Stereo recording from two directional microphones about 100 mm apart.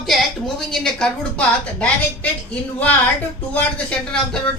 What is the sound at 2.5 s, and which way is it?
Speech, 15° left (ahead or behind).